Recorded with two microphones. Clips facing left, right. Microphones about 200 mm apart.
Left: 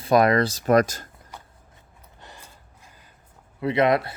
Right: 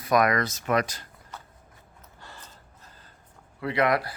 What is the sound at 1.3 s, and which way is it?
Vehicle, 10° left (ahead or behind).